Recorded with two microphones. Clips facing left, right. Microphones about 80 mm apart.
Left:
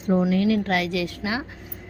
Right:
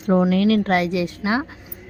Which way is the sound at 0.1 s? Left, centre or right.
Right.